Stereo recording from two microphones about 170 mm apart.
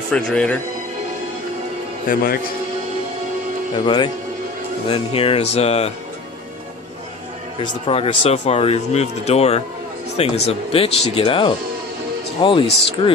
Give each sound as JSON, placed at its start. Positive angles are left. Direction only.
{"t": 0.1, "sound": "speech", "side_deg": 5}
{"t": 2.1, "sound": "a man's voice", "side_deg": 55}
{"t": 3.8, "sound": "speech", "side_deg": 25}
{"t": 7.6, "sound": "speech", "side_deg": 35}